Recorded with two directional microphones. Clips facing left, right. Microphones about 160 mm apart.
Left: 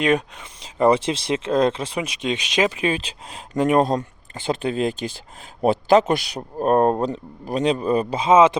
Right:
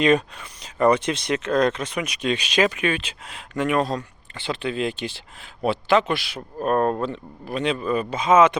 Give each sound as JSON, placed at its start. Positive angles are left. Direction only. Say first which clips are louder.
{"t": 0.3, "sound": "speech", "louder": "left 2 dB", "side_deg": 25}